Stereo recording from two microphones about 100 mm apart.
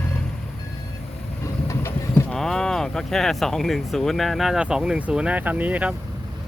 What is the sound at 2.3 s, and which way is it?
Speech, 5° left (ahead or behind).